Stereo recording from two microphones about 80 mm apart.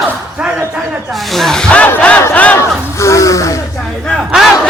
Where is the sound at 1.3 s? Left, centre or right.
Centre.